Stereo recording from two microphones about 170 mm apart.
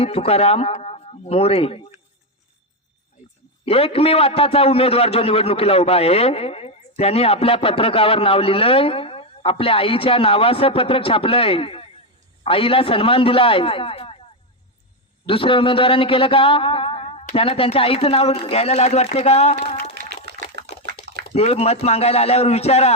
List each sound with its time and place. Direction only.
0.0 s a man's voice: 35° left (ahead or behind)
3.7 s a man's voice: 35° left (ahead or behind)
15.3 s a man's voice: 30° left (ahead or behind)
19.9 s a sound: 80° right
21.3 s a man's voice: 40° left (ahead or behind)